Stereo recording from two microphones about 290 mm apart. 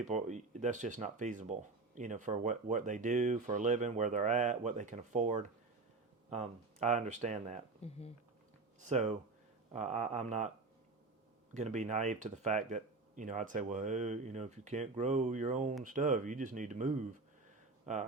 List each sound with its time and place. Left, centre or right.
0.0 s speech: right
7.8 s speech: left
8.8 s speech: right
11.5 s speech: right